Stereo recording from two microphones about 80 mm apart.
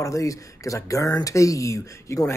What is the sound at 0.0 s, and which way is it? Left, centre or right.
Speech, left.